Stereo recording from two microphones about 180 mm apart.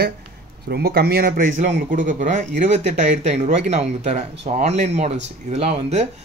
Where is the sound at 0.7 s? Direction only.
65° right (ahead or behind).